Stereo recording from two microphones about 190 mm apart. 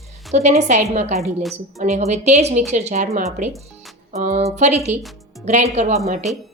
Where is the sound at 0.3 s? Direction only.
35° right (ahead or behind).